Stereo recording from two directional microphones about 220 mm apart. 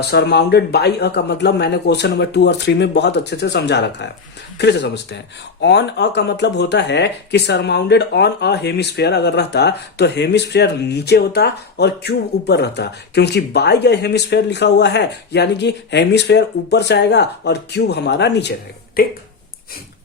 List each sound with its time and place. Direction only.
0.0 s speech: 50° left (ahead or behind)